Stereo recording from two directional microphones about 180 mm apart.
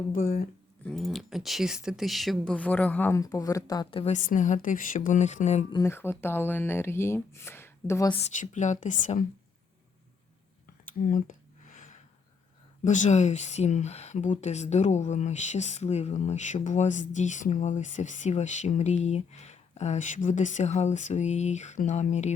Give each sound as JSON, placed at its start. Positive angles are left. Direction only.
{"t": 0.1, "sound": "speech", "side_deg": 50}
{"t": 0.9, "sound": "speech", "side_deg": 0}
{"t": 4.0, "sound": "speech", "side_deg": 40}
{"t": 5.7, "sound": "speech", "side_deg": 15}
{"t": 8.2, "sound": "speech", "side_deg": 40}
{"t": 11.0, "sound": "a sound", "side_deg": 50}
{"t": 12.8, "sound": "speech", "side_deg": 40}